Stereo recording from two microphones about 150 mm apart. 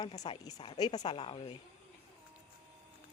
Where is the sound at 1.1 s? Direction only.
35° left (ahead or behind).